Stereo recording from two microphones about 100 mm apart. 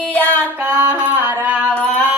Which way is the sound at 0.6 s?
20° right (ahead or behind).